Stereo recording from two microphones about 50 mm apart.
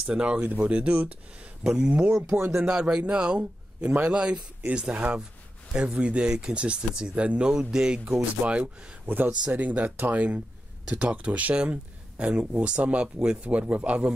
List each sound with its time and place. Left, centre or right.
0.0 s speech: right
9.0 s a man's voice: right